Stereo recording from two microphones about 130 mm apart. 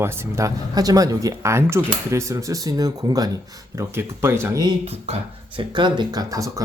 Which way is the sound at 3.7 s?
20° right (ahead or behind).